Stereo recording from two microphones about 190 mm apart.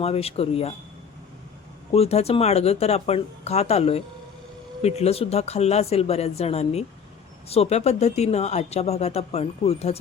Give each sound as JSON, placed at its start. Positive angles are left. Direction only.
{"t": 0.0, "sound": "speech", "side_deg": 30}
{"t": 1.9, "sound": "speech", "side_deg": 35}